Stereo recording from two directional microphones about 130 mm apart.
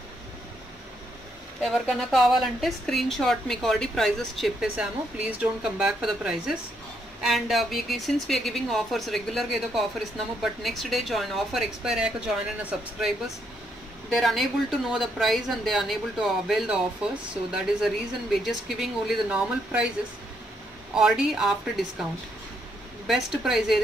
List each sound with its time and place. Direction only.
1.6 s speech: centre (ahead or behind)
14.1 s speech: centre (ahead or behind)
20.9 s speech: 5° right (ahead or behind)
23.0 s speech: centre (ahead or behind)